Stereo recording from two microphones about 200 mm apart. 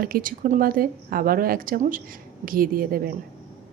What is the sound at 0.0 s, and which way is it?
A woman's voice, 45° right (ahead or behind).